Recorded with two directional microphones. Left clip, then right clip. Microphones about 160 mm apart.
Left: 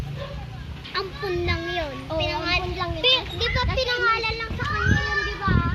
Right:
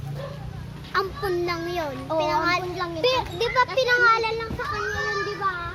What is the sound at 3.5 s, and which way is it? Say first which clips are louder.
Speech: right 6 dB; 70° right (ahead or behind).